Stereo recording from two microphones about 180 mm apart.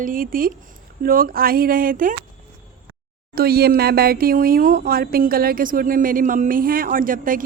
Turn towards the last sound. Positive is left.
turn(degrees=-50)  # may be behind; listen again after turning